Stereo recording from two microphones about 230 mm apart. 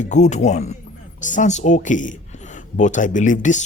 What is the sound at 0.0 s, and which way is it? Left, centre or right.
Speech, left.